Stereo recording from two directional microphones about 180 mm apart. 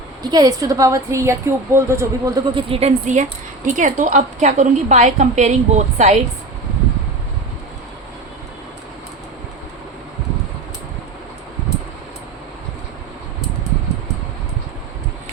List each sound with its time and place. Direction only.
0.2 s a woman's voice: 20° right (ahead or behind); by 6.1 s 40° right (ahead or behind)